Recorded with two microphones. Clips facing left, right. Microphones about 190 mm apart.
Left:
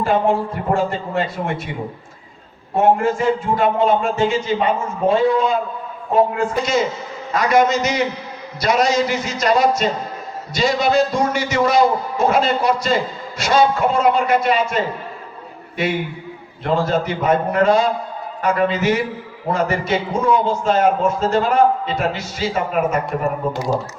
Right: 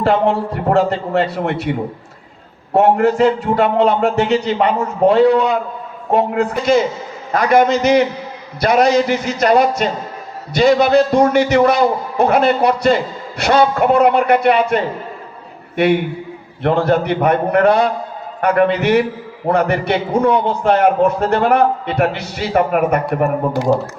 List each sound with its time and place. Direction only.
0.0 s a man's voice: 70° right (ahead or behind)
2.7 s a man's voice: 70° right (ahead or behind)
7.3 s a man's voice: 55° right (ahead or behind)